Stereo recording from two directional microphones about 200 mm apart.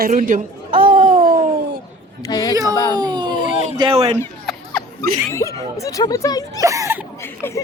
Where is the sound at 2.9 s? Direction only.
20° right (ahead or behind).